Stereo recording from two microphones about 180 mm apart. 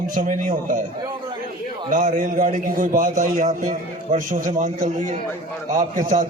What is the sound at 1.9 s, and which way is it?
A man's voice, 45° right (ahead or behind).